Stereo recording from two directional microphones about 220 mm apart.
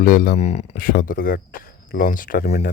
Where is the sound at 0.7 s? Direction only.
40° left (ahead or behind).